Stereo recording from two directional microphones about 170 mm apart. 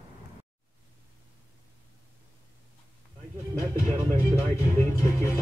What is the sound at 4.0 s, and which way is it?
Music, 10° right (ahead or behind).